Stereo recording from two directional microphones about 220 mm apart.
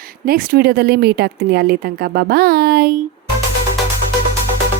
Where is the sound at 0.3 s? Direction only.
45° right (ahead or behind).